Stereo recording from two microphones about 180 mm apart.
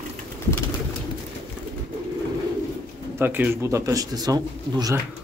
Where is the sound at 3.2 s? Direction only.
10° right (ahead or behind).